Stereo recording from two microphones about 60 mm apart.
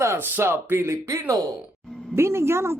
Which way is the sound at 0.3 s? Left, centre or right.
Right.